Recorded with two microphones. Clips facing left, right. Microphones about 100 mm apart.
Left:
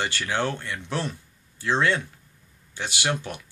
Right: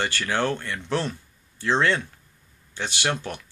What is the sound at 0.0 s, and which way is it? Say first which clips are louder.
Speech: right 1 dB; 15° left (ahead or behind).